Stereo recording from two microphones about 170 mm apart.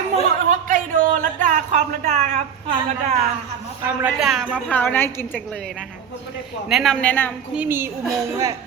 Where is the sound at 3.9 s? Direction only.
5° right (ahead or behind); by 5.4 s 15° left (ahead or behind).